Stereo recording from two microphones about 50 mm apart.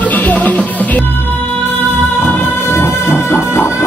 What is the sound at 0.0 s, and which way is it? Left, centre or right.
Music, left.